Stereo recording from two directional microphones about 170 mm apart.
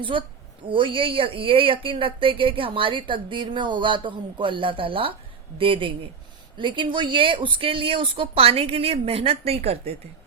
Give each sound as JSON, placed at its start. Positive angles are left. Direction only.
{"t": 0.0, "sound": "speech", "side_deg": -30}